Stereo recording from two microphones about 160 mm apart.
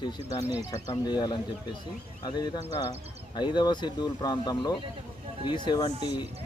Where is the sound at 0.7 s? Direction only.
25° left (ahead or behind).